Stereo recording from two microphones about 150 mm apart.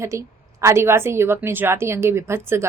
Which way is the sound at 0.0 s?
20° right (ahead or behind).